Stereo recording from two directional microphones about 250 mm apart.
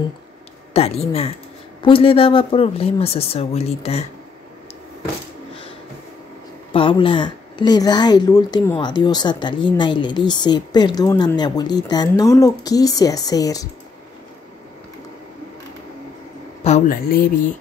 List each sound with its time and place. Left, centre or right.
0.7 s speech: left
6.7 s a woman's voice: left
16.6 s speech: left